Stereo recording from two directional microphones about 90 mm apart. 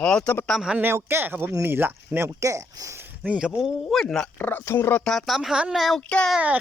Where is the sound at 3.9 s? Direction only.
5° left (ahead or behind).